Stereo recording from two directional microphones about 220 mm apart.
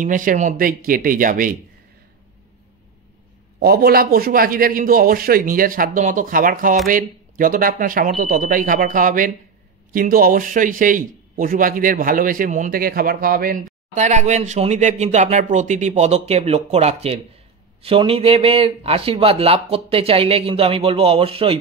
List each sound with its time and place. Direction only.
0.0 s a man's voice: 35° right (ahead or behind)
3.5 s a man's voice: 45° right (ahead or behind); by 21.5 s 25° right (ahead or behind)